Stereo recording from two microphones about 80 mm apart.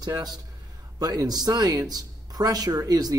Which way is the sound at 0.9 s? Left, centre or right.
Right.